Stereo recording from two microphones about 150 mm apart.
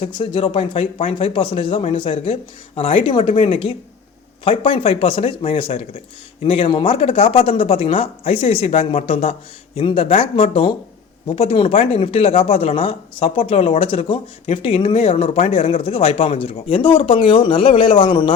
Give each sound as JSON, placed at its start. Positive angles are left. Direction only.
{"t": 0.0, "sound": "speech", "side_deg": 35}